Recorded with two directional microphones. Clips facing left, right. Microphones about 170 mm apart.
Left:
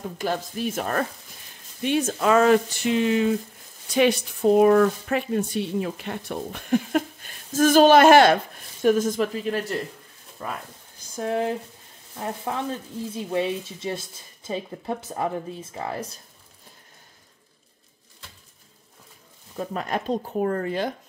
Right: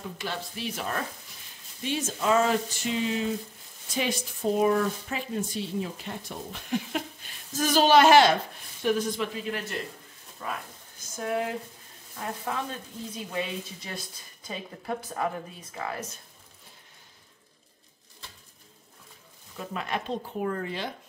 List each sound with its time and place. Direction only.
0.2 s speech: 45° left (ahead or behind)
11.1 s speech: 30° left (ahead or behind)
13.1 s speech: 25° left (ahead or behind)
19.5 s speech: 40° left (ahead or behind)